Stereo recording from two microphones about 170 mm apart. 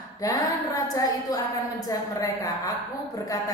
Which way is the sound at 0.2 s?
20° left (ahead or behind).